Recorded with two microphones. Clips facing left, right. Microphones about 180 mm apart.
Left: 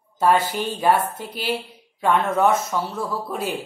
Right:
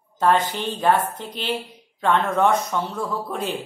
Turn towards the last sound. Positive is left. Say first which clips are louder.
# even
turn(degrees=5)  # may be behind; listen again after turning